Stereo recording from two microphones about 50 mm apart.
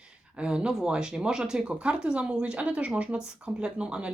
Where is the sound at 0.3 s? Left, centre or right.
Centre.